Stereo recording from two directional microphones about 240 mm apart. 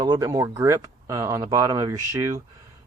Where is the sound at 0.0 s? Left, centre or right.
Centre.